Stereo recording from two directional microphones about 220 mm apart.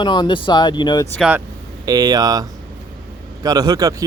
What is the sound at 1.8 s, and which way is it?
Speech, 15° right (ahead or behind).